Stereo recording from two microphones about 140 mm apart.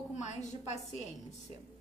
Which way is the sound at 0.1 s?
55° left (ahead or behind).